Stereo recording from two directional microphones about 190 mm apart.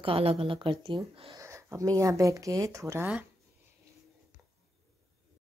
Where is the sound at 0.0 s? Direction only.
30° right (ahead or behind).